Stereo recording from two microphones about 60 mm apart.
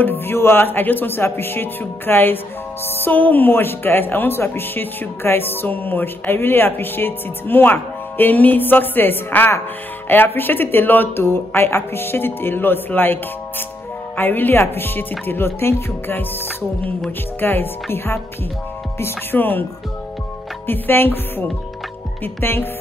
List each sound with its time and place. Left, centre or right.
0.0 s speech: left
17.4 s speech: left
20.6 s speech: left